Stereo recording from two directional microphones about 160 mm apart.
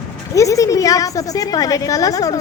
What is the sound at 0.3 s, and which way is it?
A woman's voice, 20° left (ahead or behind).